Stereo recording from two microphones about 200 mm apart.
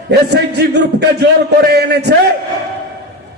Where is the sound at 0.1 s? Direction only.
55° right (ahead or behind).